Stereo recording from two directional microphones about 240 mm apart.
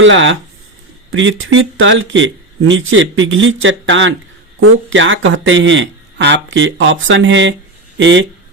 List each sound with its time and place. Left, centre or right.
0.0 s speech: right